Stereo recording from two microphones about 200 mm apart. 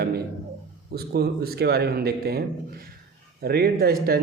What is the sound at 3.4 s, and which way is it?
Speech, 50° right (ahead or behind).